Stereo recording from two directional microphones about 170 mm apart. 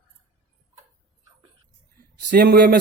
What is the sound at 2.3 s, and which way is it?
Speech, 65° right (ahead or behind).